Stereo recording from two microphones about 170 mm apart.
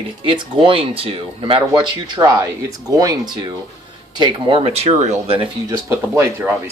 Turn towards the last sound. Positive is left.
turn(degrees=-10)  # may be behind; listen again after turning